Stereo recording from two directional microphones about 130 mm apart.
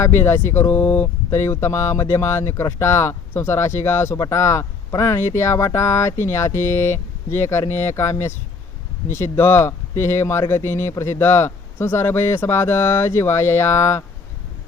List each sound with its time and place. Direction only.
0.0 s speech: 20° left (ahead or behind)